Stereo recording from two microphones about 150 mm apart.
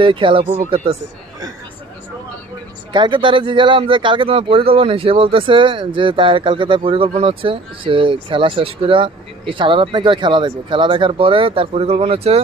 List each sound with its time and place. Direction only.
0.0 s speech: 35° right (ahead or behind)
2.9 s speech: 30° right (ahead or behind)